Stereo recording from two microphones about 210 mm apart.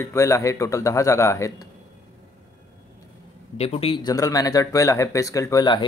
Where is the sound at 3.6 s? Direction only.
30° left (ahead or behind).